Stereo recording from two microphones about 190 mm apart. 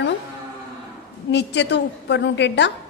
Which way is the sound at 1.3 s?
65° left (ahead or behind).